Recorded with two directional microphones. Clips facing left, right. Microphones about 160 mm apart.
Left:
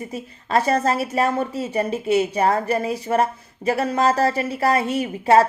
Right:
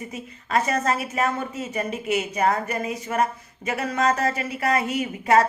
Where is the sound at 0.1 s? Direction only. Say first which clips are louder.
Left 3 dB; 30° left (ahead or behind).